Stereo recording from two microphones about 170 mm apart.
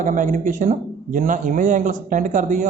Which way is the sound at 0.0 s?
50° right (ahead or behind).